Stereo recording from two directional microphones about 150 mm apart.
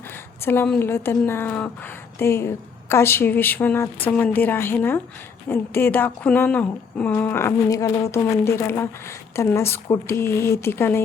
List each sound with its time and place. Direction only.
0.4 s speech: 15° left (ahead or behind)